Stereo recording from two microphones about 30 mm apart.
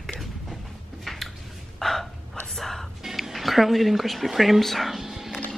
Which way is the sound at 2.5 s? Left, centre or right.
Centre.